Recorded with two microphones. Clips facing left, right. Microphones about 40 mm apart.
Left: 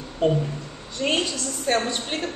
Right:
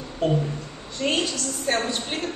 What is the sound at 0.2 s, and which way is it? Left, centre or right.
Speech, centre.